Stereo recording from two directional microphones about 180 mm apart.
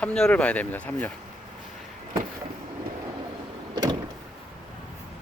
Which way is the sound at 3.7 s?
20° right (ahead or behind).